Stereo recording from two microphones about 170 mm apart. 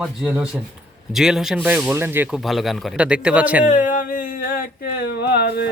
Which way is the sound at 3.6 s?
50° left (ahead or behind).